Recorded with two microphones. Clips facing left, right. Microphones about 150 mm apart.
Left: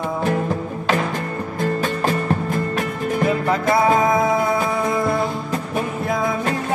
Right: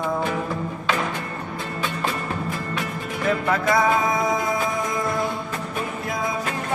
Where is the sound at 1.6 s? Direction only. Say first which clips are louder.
Left 8 dB; 45° left (ahead or behind).